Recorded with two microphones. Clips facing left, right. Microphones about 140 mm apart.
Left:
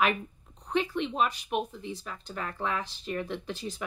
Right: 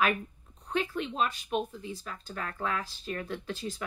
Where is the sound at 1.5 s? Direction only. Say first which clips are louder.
Left 1 dB; 20° left (ahead or behind).